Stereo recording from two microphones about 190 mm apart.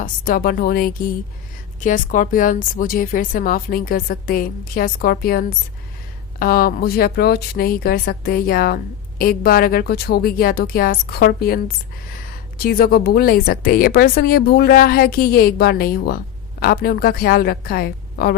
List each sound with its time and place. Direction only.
0.0 s speech: 50° left (ahead or behind)
12.6 s speech: 50° left (ahead or behind)